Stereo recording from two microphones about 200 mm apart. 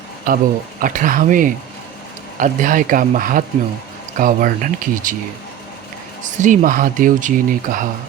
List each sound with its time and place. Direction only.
0.3 s speech: 45° right (ahead or behind)
6.4 s speech: 40° right (ahead or behind)